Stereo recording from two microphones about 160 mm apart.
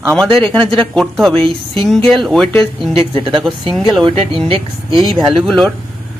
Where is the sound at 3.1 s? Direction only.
30° right (ahead or behind).